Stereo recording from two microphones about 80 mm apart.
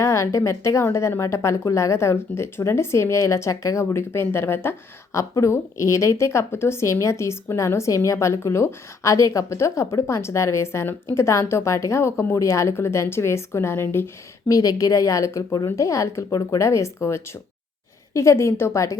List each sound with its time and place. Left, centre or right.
0.0 s a sound: left
0.3 s a woman's voice: left
5.1 s a woman's voice: left
14.4 s a woman's voice: left